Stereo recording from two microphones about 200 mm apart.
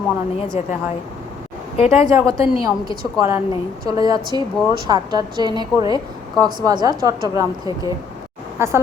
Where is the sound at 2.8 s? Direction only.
45° right (ahead or behind).